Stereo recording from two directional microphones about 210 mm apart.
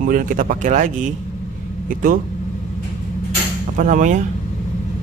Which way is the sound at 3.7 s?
40° right (ahead or behind).